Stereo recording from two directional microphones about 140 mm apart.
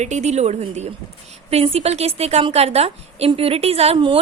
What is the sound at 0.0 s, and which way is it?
A woman's voice, 55° right (ahead or behind).